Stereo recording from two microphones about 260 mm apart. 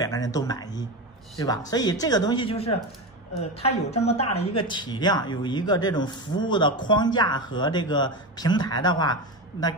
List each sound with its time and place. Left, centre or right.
0.0 s speech: centre